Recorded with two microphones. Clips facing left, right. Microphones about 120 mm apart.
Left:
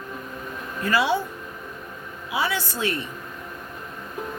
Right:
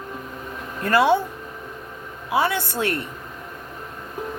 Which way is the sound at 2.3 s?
55° right (ahead or behind).